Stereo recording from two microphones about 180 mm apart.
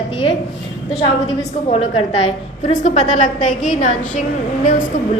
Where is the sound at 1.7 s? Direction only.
35° left (ahead or behind).